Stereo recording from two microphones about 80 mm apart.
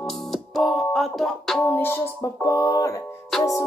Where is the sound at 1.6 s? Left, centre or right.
Left.